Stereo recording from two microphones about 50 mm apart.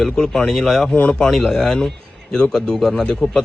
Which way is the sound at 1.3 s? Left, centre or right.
Centre.